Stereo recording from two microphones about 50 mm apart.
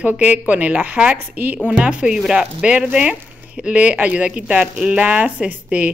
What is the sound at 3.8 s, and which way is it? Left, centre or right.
Speech, right.